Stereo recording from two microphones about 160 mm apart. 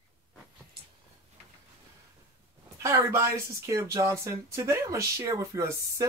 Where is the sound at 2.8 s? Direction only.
15° right (ahead or behind).